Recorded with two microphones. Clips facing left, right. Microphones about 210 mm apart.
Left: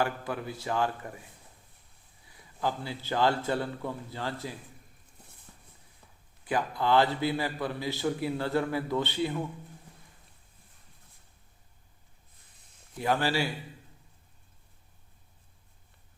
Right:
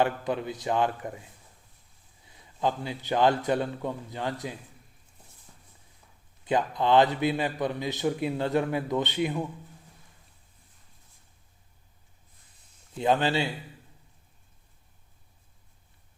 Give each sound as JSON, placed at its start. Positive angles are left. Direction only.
{"t": 0.0, "sound": "a man's voice", "side_deg": -20}
{"t": 6.4, "sound": "a man's voice", "side_deg": -20}
{"t": 13.0, "sound": "a man's voice", "side_deg": -20}